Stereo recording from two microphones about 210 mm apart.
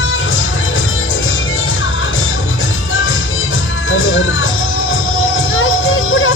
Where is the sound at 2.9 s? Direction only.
70° left (ahead or behind).